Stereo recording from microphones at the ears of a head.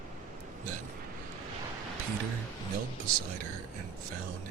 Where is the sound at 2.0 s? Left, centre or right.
Right.